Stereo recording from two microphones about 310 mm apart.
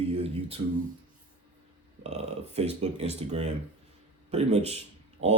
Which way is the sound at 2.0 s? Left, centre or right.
Right.